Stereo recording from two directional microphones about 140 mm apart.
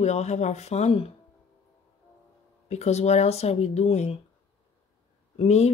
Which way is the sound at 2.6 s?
50° left (ahead or behind).